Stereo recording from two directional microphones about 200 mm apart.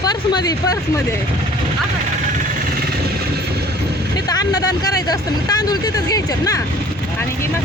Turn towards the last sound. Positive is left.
turn(degrees=20)  # may be behind; listen again after turning